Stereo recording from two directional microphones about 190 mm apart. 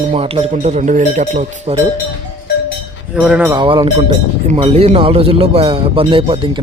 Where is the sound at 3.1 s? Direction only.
5° right (ahead or behind).